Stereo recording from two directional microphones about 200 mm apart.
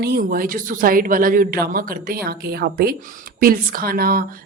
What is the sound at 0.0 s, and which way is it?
Speech, 50° right (ahead or behind).